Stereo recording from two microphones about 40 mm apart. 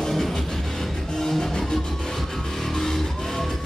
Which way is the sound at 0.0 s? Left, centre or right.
Centre.